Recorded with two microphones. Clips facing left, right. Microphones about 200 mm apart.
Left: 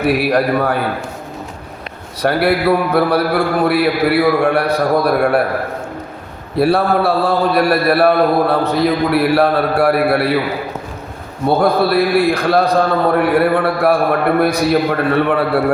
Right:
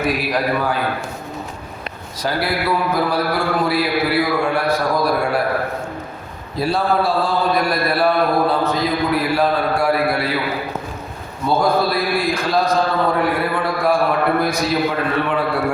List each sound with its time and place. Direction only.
0.0 s a man's voice: 65° left (ahead or behind)
2.2 s a man's voice: 65° left (ahead or behind)
6.6 s a man's voice: 60° left (ahead or behind)
11.4 s a man's voice: 60° left (ahead or behind)